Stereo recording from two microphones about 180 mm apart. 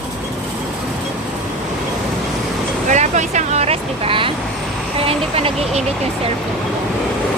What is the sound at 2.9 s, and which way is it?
Vehicle, 40° right (ahead or behind).